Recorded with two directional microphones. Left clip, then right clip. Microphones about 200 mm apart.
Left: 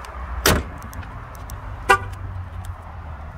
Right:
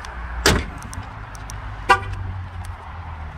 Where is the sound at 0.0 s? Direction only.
50° left (ahead or behind).